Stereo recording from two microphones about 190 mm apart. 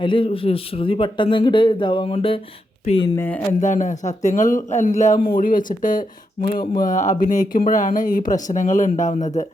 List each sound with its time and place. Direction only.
0.0 s a man's voice: 25° left (ahead or behind)
3.2 s speech: 10° left (ahead or behind)
3.6 s speech: 40° left (ahead or behind)